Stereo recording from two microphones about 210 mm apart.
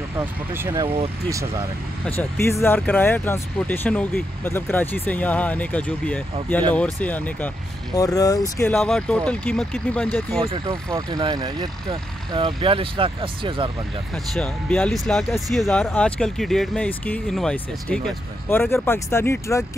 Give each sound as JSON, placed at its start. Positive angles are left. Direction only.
{"t": 0.2, "sound": "speech", "side_deg": -10}
{"t": 2.0, "sound": "speech", "side_deg": 10}
{"t": 10.4, "sound": "speech", "side_deg": -20}
{"t": 14.1, "sound": "speech", "side_deg": 0}